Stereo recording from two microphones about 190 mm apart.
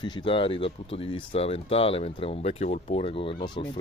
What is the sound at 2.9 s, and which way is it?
Speech, 30° left (ahead or behind).